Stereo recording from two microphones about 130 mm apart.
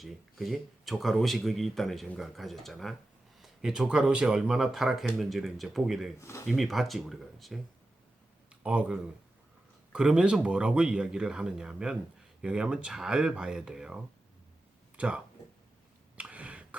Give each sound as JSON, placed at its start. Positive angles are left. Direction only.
{"t": 0.0, "sound": "speech", "side_deg": 0}
{"t": 6.1, "sound": "speech", "side_deg": 25}
{"t": 6.4, "sound": "speech", "side_deg": 0}
{"t": 8.6, "sound": "speech", "side_deg": -10}
{"t": 16.1, "sound": "a sound", "side_deg": -10}